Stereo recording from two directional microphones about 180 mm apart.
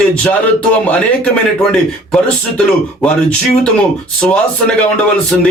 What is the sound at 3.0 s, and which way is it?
Speech, 5° left (ahead or behind).